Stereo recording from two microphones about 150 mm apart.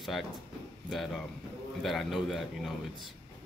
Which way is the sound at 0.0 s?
Centre (ahead or behind).